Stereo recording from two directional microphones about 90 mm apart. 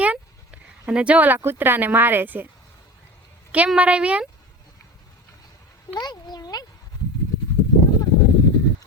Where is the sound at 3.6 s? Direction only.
15° right (ahead or behind).